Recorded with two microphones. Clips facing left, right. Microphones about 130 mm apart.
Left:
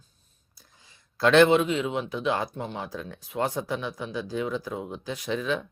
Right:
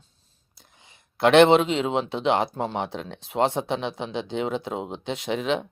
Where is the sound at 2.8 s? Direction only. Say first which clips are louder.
Right 5 dB; 75° right (ahead or behind).